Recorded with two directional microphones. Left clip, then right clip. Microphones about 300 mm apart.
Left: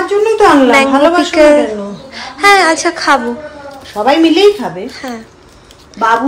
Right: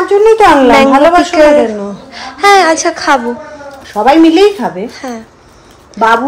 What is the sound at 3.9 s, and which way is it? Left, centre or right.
Speech, right.